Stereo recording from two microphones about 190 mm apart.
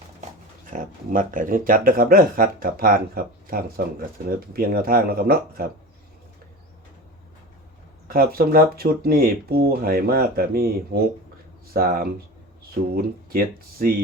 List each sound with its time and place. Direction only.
0.7 s speech: 45° right (ahead or behind)
8.0 s speech: 50° right (ahead or behind)